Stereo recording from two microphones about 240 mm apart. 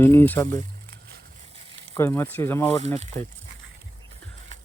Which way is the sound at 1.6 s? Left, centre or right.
Right.